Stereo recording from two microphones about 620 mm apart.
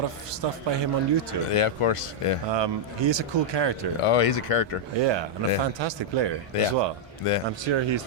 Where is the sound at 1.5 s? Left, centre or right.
Left.